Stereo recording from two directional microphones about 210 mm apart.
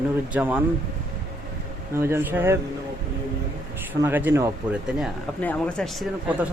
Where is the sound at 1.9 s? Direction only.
10° right (ahead or behind).